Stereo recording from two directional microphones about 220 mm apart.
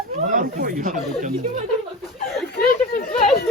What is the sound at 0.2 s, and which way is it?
Speech, 35° right (ahead or behind).